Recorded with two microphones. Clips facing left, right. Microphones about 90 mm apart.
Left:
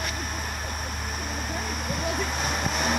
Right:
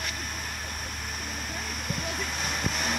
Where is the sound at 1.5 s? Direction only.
25° left (ahead or behind).